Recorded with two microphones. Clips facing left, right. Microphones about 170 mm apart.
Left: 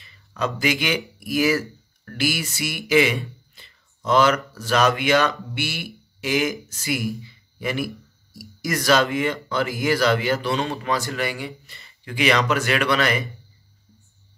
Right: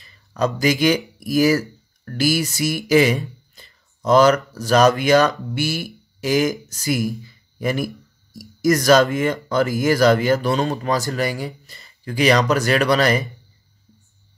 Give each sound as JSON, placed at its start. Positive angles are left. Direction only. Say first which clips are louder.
{"t": 0.0, "sound": "speech", "louder": "right 5 dB", "side_deg": -40}
{"t": 2.9, "sound": "a sound", "louder": "right 3 dB", "side_deg": -40}
{"t": 4.6, "sound": "speech", "louder": "right 5 dB", "side_deg": -40}